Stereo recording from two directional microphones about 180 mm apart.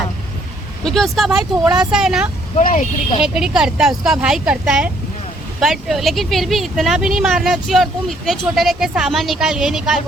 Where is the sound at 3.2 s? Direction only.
5° right (ahead or behind).